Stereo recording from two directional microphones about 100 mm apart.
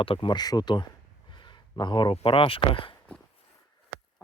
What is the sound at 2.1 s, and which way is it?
Speech, 65° left (ahead or behind).